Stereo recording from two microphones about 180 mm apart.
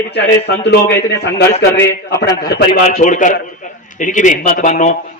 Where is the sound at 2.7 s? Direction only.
50° left (ahead or behind).